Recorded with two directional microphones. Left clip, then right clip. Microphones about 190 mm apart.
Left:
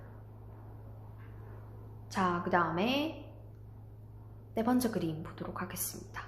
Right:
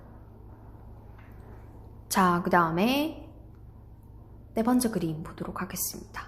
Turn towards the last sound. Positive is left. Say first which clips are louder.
# right 5 dB
turn(degrees=-10)  # may be behind; listen again after turning